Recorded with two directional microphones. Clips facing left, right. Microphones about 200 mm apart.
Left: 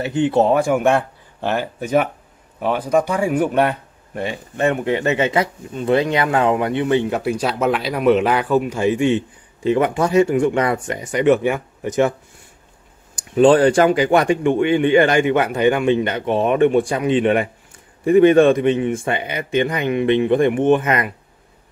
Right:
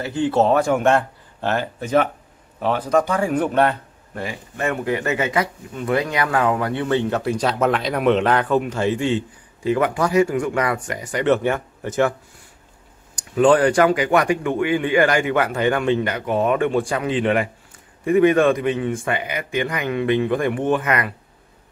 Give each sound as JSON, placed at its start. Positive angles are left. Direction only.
{"t": 0.0, "sound": "speech", "side_deg": 20}
{"t": 13.1, "sound": "speech", "side_deg": 25}